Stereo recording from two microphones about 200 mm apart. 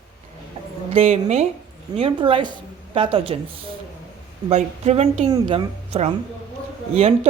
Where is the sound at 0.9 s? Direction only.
30° right (ahead or behind).